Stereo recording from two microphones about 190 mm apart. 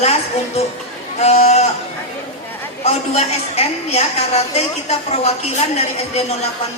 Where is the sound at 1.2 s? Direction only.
35° left (ahead or behind).